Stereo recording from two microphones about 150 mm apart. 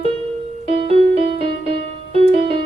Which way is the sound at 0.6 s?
40° right (ahead or behind).